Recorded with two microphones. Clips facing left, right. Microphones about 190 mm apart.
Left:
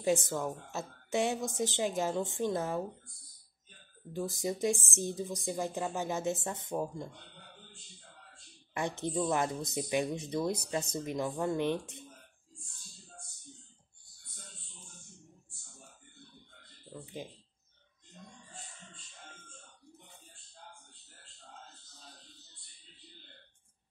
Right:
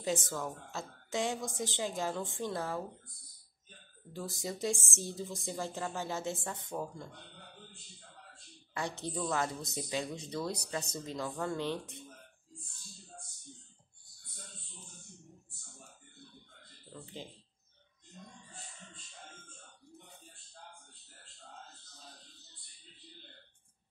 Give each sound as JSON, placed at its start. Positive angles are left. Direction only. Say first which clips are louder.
{"t": 0.0, "sound": "speech", "louder": "left 5 dB", "side_deg": 15}
{"t": 4.1, "sound": "speech", "louder": "left 5 dB", "side_deg": 20}
{"t": 9.0, "sound": "speech", "louder": "left 4 dB", "side_deg": 20}
{"t": 16.9, "sound": "a sound", "louder": "left 3 dB", "side_deg": 15}